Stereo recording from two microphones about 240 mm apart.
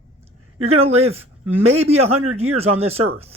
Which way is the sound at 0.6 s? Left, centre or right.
Right.